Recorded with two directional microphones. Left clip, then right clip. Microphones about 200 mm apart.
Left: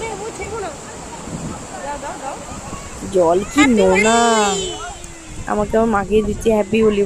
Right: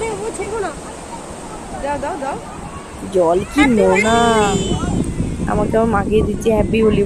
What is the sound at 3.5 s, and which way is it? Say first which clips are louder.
Speech: even; 40° left (ahead or behind).